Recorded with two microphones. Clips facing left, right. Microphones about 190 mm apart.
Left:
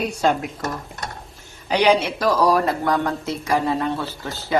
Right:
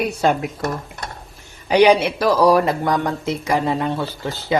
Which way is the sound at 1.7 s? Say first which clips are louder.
Right 4 dB; 10° right (ahead or behind).